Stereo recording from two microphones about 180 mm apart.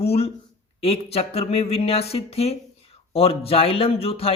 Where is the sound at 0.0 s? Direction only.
35° left (ahead or behind).